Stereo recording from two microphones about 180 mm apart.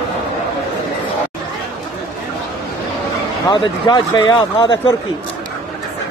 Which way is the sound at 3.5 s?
25° left (ahead or behind).